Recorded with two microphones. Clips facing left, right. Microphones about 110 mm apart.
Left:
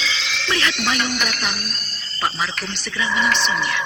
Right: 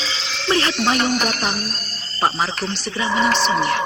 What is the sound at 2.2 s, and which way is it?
Speech, 35° right (ahead or behind).